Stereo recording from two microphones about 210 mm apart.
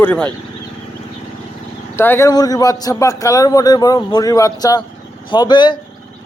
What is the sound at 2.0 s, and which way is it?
A man's voice, 10° left (ahead or behind).